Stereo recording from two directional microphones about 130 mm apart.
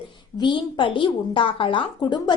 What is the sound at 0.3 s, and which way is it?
A woman's voice, 35° left (ahead or behind).